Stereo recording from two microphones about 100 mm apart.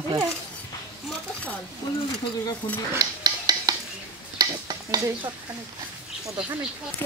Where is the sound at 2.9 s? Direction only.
40° right (ahead or behind).